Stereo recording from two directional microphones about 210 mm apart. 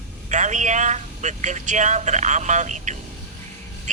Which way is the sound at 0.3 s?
35° right (ahead or behind).